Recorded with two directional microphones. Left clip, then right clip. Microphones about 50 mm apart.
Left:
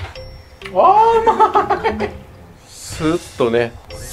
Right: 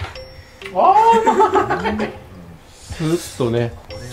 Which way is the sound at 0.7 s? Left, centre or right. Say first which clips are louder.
Left 1 dB; centre.